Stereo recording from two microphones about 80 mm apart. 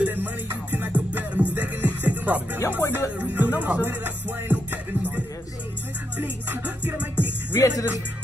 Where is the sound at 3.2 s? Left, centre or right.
Right.